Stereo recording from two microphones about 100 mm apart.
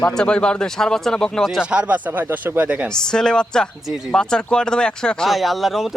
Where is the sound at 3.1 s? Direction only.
5° left (ahead or behind).